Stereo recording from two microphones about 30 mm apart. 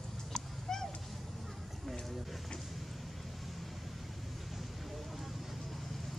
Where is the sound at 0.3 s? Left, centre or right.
Centre.